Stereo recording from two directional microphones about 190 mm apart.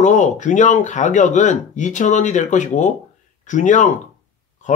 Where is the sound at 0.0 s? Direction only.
40° left (ahead or behind).